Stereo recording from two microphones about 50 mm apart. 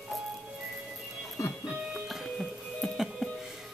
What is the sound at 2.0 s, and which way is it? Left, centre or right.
Music, centre.